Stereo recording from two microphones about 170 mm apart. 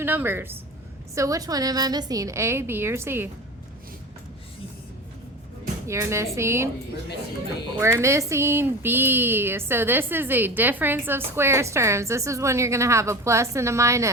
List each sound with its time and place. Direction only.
0.0 s a woman's voice: 10° right (ahead or behind)
5.9 s speech: 15° right (ahead or behind)
7.8 s speech: 15° right (ahead or behind)